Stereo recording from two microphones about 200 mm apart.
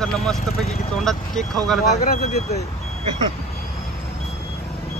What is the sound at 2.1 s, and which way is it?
Speech, 50° left (ahead or behind).